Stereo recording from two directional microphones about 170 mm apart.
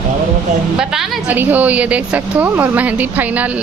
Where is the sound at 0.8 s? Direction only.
5° right (ahead or behind).